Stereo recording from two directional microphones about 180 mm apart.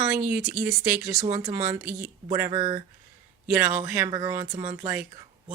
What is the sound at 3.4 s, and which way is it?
A man's voice, 10° right (ahead or behind).